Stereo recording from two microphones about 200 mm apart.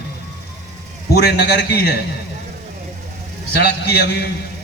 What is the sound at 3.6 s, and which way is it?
Speech, 55° left (ahead or behind).